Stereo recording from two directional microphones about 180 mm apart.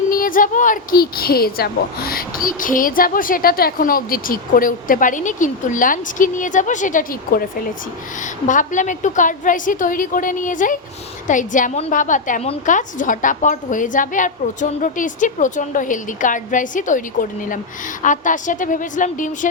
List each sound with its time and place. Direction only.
0.1 s speech: 50° left (ahead or behind)